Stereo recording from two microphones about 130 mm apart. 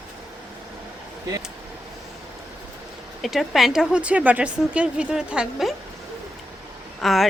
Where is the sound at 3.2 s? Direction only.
Centre (ahead or behind).